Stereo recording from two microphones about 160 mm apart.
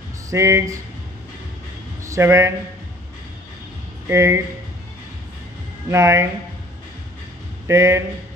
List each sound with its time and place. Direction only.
0.3 s speech: 20° right (ahead or behind)
2.0 s speech: 15° right (ahead or behind)
4.1 s speech: 15° right (ahead or behind)
5.9 s speech: 15° right (ahead or behind)
7.6 s speech: 15° right (ahead or behind)